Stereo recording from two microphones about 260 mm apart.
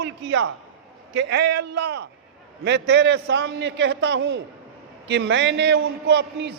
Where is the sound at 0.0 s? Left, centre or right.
Right.